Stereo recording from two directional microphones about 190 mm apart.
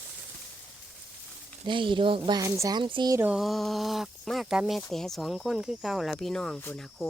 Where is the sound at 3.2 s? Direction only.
5° right (ahead or behind).